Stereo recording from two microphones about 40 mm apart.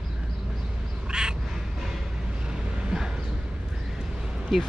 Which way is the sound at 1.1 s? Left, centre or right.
Centre.